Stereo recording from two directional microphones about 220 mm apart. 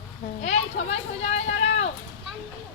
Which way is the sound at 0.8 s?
30° left (ahead or behind).